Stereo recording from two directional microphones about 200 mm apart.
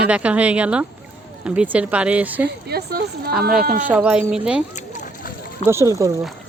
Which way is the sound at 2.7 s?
50° right (ahead or behind).